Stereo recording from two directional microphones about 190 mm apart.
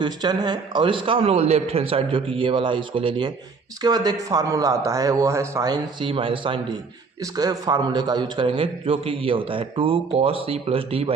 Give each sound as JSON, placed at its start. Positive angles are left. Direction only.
{"t": 0.0, "sound": "a man's voice", "side_deg": -20}